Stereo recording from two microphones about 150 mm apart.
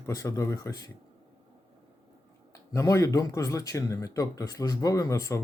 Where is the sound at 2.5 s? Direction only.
20° left (ahead or behind).